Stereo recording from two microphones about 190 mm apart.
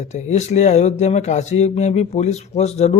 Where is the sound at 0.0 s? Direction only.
35° left (ahead or behind).